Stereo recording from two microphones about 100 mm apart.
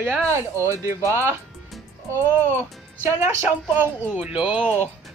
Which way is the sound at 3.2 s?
25° right (ahead or behind).